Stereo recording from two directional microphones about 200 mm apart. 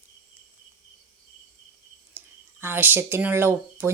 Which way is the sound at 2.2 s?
10° right (ahead or behind).